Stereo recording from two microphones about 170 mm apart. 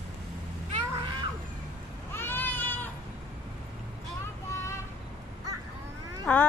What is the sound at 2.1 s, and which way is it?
Baby cry, 10° left (ahead or behind).